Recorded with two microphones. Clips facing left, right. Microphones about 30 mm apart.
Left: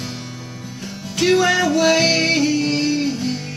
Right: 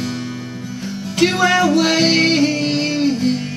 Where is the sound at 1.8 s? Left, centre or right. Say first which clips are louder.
Right 1 dB; right.